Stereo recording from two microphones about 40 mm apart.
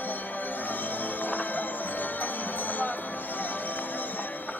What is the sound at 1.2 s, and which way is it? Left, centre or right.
Music, left.